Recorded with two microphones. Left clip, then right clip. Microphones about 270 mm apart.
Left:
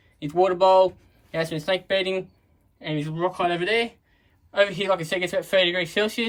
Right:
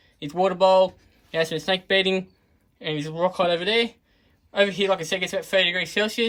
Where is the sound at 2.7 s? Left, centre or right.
Centre.